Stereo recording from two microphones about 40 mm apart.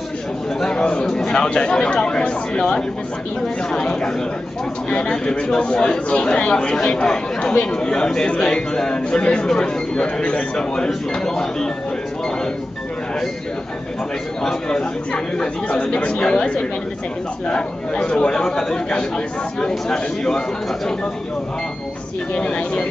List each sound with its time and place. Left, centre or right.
0.6 s a sound: centre
1.0 s speech: centre
9.2 s speech: left
14.4 s speech: centre
15.9 s speech: left
16.2 s speech: left
22.3 s speech: left